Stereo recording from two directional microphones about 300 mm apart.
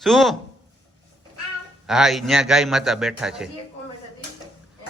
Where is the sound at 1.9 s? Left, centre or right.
Centre.